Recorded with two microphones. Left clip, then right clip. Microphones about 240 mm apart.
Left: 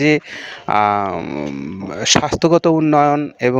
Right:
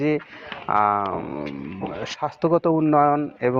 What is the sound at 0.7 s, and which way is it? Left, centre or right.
A man's voice, left.